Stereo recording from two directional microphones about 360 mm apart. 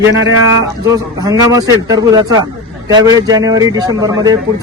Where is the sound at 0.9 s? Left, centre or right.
Centre.